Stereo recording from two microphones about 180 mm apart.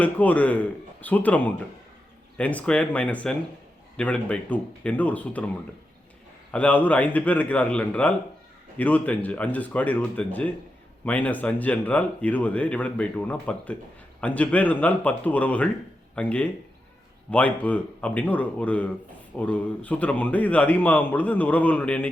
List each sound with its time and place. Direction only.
0.0 s speech: 10° left (ahead or behind)
6.5 s speech: 10° left (ahead or behind)